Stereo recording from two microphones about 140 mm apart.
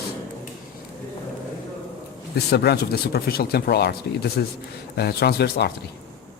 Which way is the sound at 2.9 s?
90° left.